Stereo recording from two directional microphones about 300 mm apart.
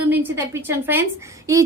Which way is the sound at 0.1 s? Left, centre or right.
Centre.